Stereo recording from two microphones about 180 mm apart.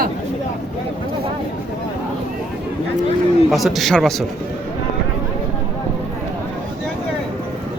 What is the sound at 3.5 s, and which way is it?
Speech, centre (ahead or behind).